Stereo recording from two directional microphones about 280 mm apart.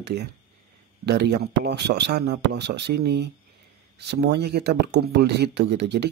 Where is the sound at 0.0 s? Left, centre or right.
Right.